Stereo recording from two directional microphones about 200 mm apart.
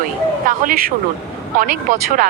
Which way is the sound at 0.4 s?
45° right (ahead or behind).